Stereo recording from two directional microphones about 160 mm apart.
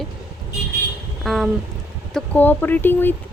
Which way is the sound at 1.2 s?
Centre (ahead or behind).